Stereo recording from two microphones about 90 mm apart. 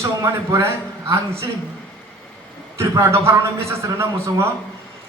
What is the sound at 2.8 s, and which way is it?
A man's voice, 30° right (ahead or behind).